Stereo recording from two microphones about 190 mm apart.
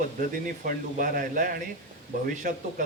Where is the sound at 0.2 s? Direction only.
45° right (ahead or behind).